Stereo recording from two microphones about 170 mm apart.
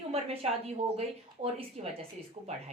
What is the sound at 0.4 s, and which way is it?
A woman's voice, 35° right (ahead or behind).